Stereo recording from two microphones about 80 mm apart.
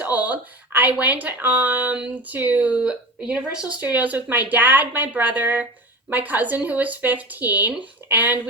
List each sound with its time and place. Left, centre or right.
0.0 s speech: centre